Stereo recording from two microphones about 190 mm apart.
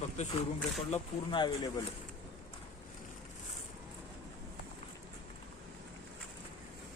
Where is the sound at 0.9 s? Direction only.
25° left (ahead or behind).